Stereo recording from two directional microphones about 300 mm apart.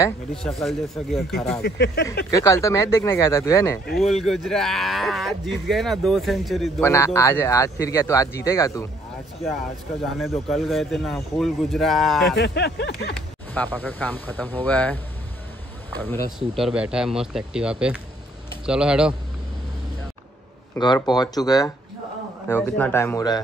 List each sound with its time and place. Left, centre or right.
0.0 s speech: centre
1.6 s speech: left
2.3 s speech: centre
10.1 s speech: centre
12.4 s speech: left
13.1 s speech: centre
16.3 s speech: centre
20.7 s speech: centre